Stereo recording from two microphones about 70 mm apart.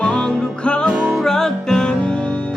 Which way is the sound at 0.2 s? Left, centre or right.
Centre.